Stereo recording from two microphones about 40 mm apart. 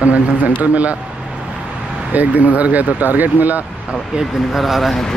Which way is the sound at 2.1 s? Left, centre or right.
Right.